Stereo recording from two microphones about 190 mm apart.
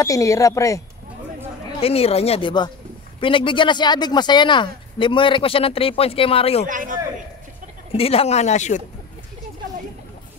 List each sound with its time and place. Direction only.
0.0 s speech: 15° left (ahead or behind)
1.8 s speech: 30° left (ahead or behind)
6.7 s a man's voice: 45° right (ahead or behind)
7.9 s speech: 30° left (ahead or behind)